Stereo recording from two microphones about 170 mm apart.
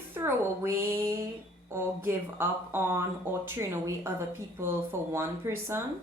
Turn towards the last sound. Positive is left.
turn(degrees=-15)  # may be behind; listen again after turning